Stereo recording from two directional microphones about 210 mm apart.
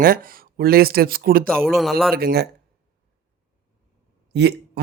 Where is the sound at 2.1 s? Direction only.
45° right (ahead or behind).